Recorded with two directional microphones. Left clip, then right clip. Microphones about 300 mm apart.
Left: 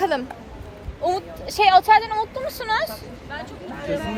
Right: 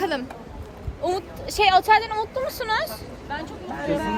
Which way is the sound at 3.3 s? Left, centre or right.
Right.